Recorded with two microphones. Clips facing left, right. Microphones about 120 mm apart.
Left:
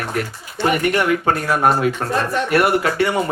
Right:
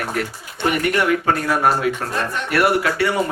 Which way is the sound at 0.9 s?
25° left (ahead or behind).